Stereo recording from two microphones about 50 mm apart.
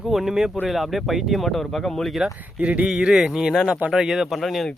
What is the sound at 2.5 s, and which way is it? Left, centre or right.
Speech, right.